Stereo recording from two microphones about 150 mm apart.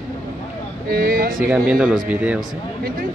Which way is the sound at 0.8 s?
75° right (ahead or behind).